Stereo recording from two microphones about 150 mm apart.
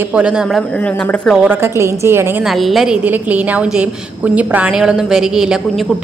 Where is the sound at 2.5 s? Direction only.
Centre (ahead or behind).